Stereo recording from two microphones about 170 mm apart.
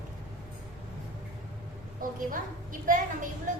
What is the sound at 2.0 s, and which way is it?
A woman's voice, 55° right (ahead or behind).